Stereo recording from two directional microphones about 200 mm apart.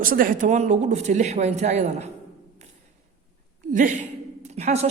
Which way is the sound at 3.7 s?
40° right (ahead or behind).